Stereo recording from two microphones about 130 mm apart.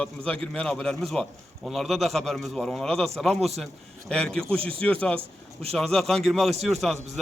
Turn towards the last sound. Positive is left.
turn(degrees=0)  # may be behind; listen again after turning